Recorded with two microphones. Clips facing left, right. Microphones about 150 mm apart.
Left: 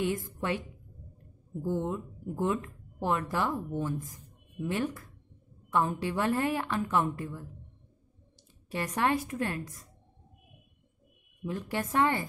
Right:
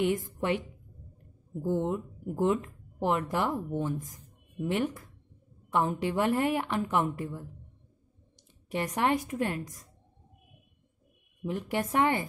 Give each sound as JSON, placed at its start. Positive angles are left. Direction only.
{"t": 0.0, "sound": "speech", "side_deg": -15}
{"t": 8.6, "sound": "speech", "side_deg": -20}
{"t": 11.4, "sound": "speech", "side_deg": -20}